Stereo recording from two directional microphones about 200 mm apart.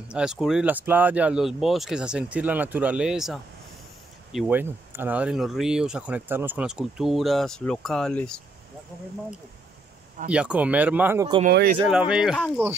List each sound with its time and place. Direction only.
0.1 s speech: 5° right (ahead or behind)
10.3 s speech: 5° right (ahead or behind)
11.4 s speech: 50° right (ahead or behind)
11.9 s speech: 5° right (ahead or behind)